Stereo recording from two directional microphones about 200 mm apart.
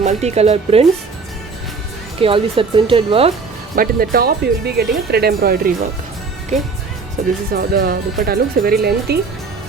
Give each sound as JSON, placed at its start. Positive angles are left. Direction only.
{"t": 0.0, "sound": "speech", "side_deg": -35}
{"t": 2.1, "sound": "speech", "side_deg": -25}
{"t": 3.8, "sound": "speech", "side_deg": -45}
{"t": 7.5, "sound": "speech", "side_deg": -50}